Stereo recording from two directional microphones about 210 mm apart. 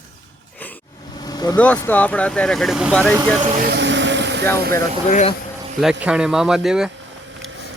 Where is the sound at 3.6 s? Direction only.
50° right (ahead or behind).